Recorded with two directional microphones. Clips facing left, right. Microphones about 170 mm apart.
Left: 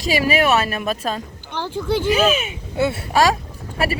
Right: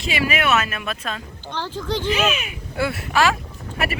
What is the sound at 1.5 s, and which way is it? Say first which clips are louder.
Speech: left 4 dB; 15° left (ahead or behind).